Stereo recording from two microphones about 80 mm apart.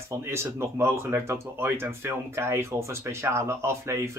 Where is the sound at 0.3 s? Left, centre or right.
Right.